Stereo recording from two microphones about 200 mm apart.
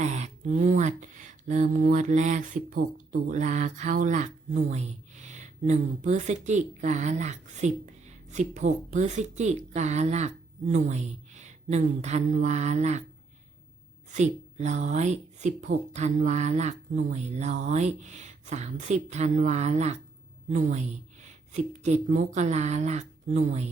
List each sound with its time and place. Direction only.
0.0 s speech: 35° right (ahead or behind)
14.1 s a woman's voice: 35° right (ahead or behind)